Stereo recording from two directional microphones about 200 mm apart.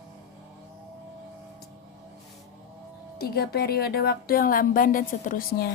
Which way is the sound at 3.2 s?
50° left (ahead or behind).